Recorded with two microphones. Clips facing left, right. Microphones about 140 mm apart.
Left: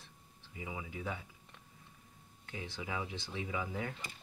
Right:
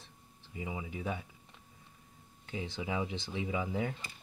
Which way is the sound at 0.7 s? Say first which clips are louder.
Right 3 dB; 25° right (ahead or behind).